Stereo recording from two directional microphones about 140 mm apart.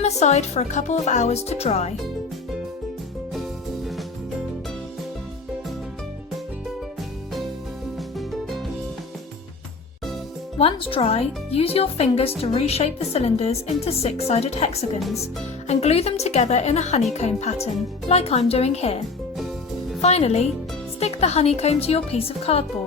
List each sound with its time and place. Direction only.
0.0 s a woman's voice: 55° left (ahead or behind)
10.6 s a woman's voice: 40° left (ahead or behind)
14.9 s speech: centre (ahead or behind)
15.6 s a woman's voice: 50° left (ahead or behind)